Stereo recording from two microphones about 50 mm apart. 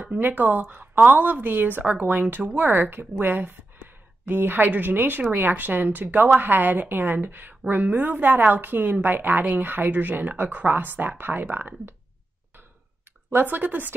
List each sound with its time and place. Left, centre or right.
0.0 s speech: right
13.3 s speech: right